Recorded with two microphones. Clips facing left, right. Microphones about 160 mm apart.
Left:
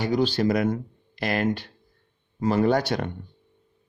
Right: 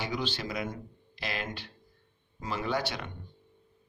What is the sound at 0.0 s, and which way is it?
A man's voice, 40° left (ahead or behind).